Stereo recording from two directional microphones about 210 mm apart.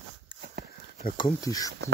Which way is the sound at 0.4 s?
50° right (ahead or behind).